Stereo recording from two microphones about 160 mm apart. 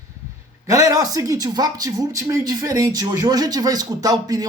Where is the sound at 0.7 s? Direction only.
25° right (ahead or behind).